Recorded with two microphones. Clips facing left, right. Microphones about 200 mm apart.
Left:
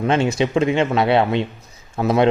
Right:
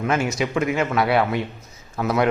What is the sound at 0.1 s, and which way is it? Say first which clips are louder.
A man's voice: left 5 dB; 25° left (ahead or behind).